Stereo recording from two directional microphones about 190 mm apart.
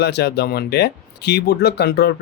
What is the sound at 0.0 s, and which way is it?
Speech, 60° left (ahead or behind).